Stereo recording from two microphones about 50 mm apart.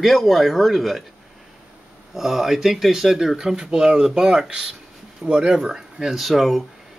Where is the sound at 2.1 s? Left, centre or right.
Centre.